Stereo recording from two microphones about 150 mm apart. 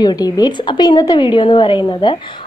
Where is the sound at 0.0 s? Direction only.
25° left (ahead or behind).